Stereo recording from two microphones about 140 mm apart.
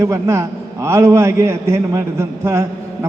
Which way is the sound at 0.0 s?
20° right (ahead or behind).